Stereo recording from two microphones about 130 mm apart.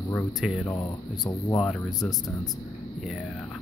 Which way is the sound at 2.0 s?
Centre (ahead or behind).